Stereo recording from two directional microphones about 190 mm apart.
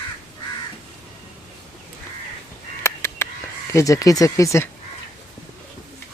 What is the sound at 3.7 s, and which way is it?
Speech, 15° left (ahead or behind).